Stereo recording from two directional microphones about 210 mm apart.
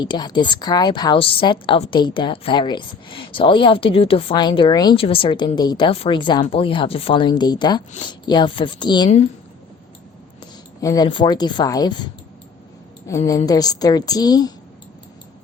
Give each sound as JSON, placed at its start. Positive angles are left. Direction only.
{"t": 0.0, "sound": "a woman's voice", "side_deg": 20}
{"t": 10.8, "sound": "a woman's voice", "side_deg": 15}
{"t": 13.1, "sound": "a woman's voice", "side_deg": 15}